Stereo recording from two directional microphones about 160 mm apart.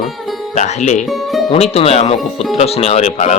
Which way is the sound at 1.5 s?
40° left (ahead or behind).